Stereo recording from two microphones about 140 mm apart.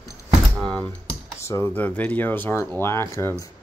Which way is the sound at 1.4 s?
20° left (ahead or behind).